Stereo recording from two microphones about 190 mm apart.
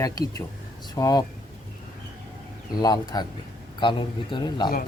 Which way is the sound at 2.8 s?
20° left (ahead or behind).